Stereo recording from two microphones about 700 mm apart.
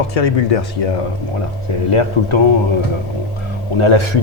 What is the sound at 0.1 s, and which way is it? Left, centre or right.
Speech, left.